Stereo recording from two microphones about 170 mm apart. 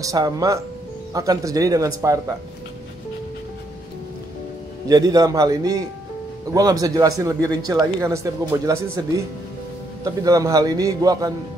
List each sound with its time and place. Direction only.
0.0 s speech: 20° right (ahead or behind)
4.8 s speech: 20° right (ahead or behind)